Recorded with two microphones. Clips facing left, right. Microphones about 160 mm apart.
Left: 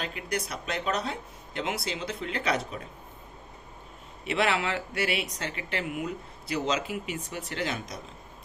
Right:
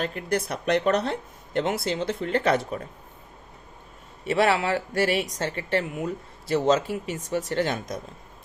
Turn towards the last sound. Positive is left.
turn(degrees=-40)  # may be behind; listen again after turning